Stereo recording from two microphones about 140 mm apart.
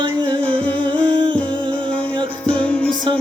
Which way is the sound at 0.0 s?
35° right (ahead or behind).